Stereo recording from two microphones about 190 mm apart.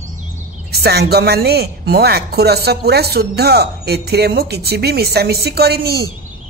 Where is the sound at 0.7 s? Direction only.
55° right (ahead or behind).